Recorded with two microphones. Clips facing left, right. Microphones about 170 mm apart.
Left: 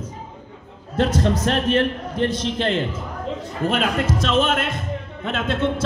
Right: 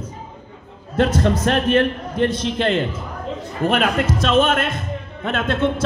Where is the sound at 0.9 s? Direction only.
55° right (ahead or behind).